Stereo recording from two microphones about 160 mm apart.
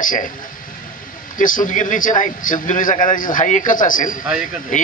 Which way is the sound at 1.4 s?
55° left (ahead or behind).